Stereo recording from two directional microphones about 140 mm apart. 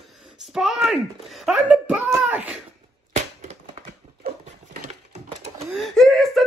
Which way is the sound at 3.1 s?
55° right (ahead or behind).